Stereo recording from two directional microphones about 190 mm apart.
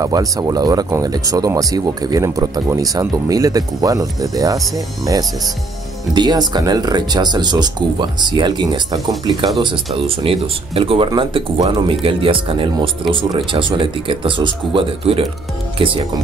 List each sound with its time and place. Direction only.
0.0 s speech: 20° right (ahead or behind)
6.1 s speech: 20° right (ahead or behind)